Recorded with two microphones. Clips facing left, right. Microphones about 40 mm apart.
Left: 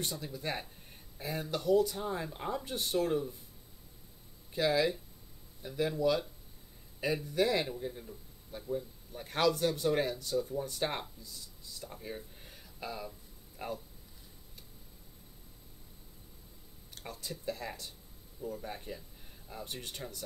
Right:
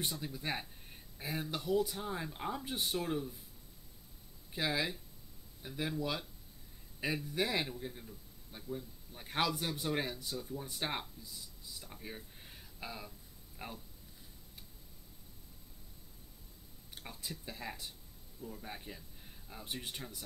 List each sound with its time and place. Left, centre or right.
0.0 s speech: centre
4.5 s speech: centre
11.8 s a sound: centre
17.0 s speech: centre
19.6 s speech: centre